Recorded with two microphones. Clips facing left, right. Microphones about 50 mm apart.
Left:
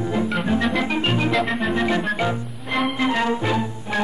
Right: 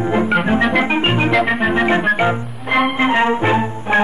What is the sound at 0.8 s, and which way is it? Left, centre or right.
Organ, right.